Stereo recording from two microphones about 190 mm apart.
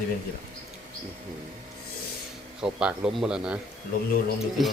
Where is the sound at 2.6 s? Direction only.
5° right (ahead or behind).